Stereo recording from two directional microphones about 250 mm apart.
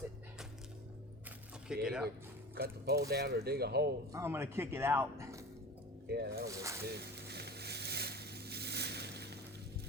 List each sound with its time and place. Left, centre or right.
1.6 s speech: centre
2.6 s speech: right
4.1 s speech: centre
6.1 s speech: right
6.5 s speech: centre
6.8 s a sound: right